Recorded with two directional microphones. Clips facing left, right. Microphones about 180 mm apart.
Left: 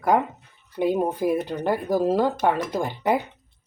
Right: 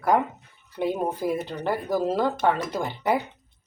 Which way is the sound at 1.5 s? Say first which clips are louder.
Left 3 dB; 15° left (ahead or behind).